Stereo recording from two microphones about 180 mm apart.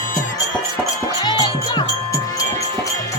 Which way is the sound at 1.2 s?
25° left (ahead or behind).